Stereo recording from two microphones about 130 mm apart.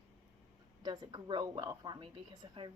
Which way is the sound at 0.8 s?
35° right (ahead or behind).